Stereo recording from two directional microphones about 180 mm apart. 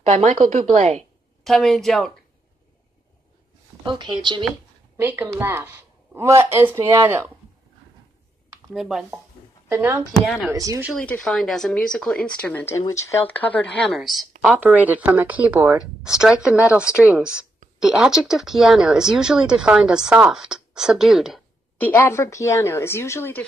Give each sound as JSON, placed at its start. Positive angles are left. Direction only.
{"t": 0.0, "sound": "speech", "side_deg": -40}
{"t": 1.4, "sound": "a woman's voice", "side_deg": 0}
{"t": 3.8, "sound": "speech", "side_deg": -25}
{"t": 4.9, "sound": "a woman's voice", "side_deg": -10}
{"t": 8.7, "sound": "a woman's voice", "side_deg": 0}
{"t": 10.2, "sound": "a woman's voice", "side_deg": 0}
{"t": 10.5, "sound": "speech", "side_deg": -20}
{"t": 11.0, "sound": "a woman's voice", "side_deg": 5}
{"t": 21.7, "sound": "a woman's voice", "side_deg": 10}